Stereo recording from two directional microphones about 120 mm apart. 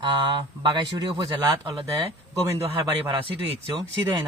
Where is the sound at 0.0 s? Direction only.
45° right (ahead or behind).